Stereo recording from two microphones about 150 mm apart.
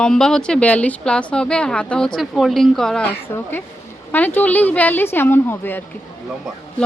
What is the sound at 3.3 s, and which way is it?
Speech, 15° left (ahead or behind).